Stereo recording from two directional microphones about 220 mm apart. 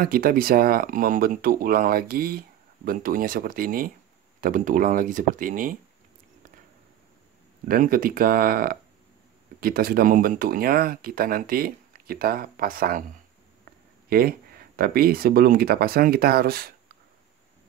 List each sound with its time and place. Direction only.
0.0 s speech: 40° right (ahead or behind)
7.6 s speech: 40° right (ahead or behind)
14.0 s speech: 40° right (ahead or behind)